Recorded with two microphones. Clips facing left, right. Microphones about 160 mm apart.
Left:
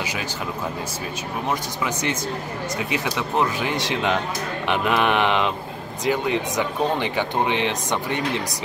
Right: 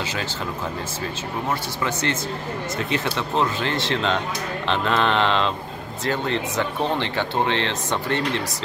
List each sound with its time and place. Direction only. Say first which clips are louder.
1.9 s speech: even; 15° left (ahead or behind)